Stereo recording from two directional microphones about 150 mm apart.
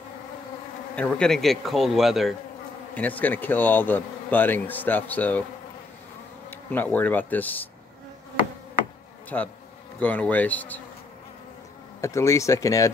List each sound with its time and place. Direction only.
0.9 s speech: 5° left (ahead or behind)
2.9 s speech: 10° left (ahead or behind)
6.7 s speech: 10° left (ahead or behind)
9.3 s speech: 10° left (ahead or behind)
12.0 s speech: 20° left (ahead or behind)